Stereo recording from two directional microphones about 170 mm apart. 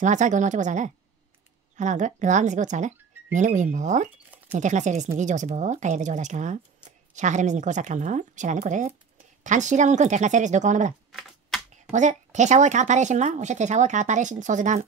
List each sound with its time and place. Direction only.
0.0 s speech: 45° right (ahead or behind)
11.1 s typing: centre (ahead or behind)
11.9 s speech: 45° right (ahead or behind)